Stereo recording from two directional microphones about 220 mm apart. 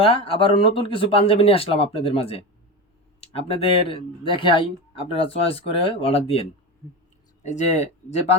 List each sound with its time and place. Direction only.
0.0 s speech: 25° left (ahead or behind)
7.4 s speech: 30° left (ahead or behind)